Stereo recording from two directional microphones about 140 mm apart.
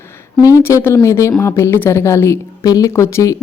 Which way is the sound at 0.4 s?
20° left (ahead or behind).